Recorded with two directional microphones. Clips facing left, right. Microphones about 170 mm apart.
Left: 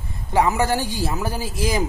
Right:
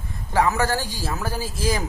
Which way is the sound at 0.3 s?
15° left (ahead or behind).